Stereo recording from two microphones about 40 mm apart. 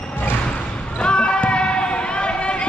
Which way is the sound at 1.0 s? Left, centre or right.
Left.